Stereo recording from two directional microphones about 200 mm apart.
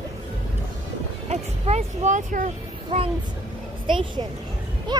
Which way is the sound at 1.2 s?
35° right (ahead or behind).